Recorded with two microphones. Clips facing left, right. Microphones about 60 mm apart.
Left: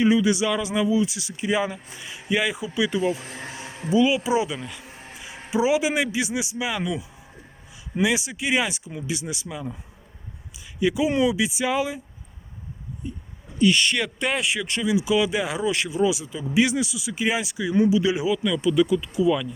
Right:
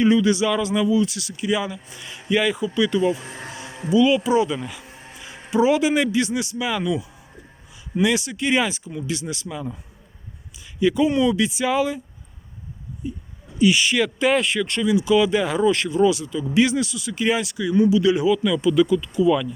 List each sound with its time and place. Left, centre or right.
0.0 s speech: centre; by 2.0 s left
2.0 s speech: centre
4.5 s speech: centre
5.5 s speech: centre
8.0 s speech: centre
10.8 s speech: centre
13.0 s speech: centre
18.4 s speech: centre